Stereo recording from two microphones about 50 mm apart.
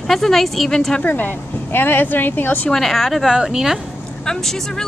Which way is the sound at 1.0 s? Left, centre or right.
Left.